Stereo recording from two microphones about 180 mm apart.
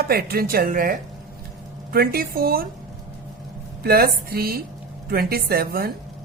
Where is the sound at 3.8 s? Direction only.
55° right (ahead or behind).